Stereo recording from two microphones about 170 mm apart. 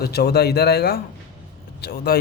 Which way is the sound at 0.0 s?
70° left (ahead or behind).